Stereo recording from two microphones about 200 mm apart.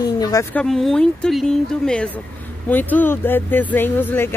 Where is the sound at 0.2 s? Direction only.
15° left (ahead or behind).